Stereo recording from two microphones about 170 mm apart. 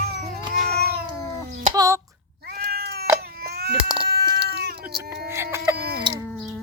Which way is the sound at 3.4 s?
70° right (ahead or behind).